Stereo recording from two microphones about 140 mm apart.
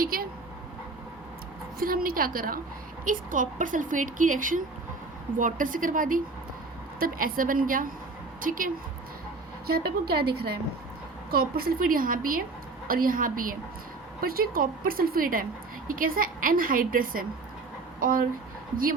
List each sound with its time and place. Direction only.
0.0 s dog: 90° right
1.8 s a woman's voice: 90° right
3.0 s a woman's voice: 70° right (ahead or behind)
7.0 s a woman's voice: 90° right
9.6 s a woman's voice: 90° right